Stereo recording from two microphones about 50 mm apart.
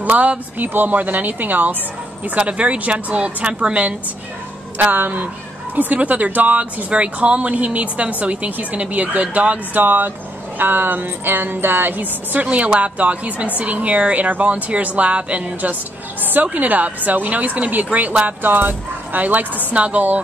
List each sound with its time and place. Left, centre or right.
0.0 s speech: right
2.3 s speech: right
4.7 s speech: right
9.8 s speech: right
16.2 s a woman's voice: right